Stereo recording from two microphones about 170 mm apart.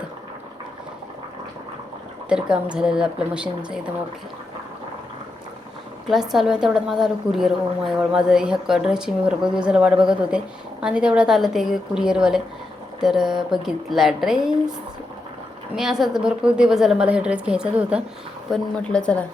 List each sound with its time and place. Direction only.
2.3 s a woman's voice: 5° right (ahead or behind)
6.1 s a woman's voice: centre (ahead or behind)
15.7 s a woman's voice: 5° right (ahead or behind)
18.5 s a woman's voice: 5° left (ahead or behind)